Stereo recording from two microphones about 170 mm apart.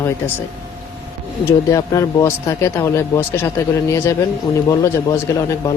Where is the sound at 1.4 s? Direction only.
20° left (ahead or behind).